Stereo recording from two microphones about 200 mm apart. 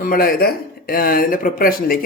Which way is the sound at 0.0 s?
45° left (ahead or behind).